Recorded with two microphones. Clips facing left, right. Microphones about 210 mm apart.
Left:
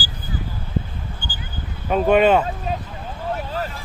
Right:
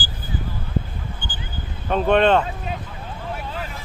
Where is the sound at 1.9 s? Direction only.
5° left (ahead or behind).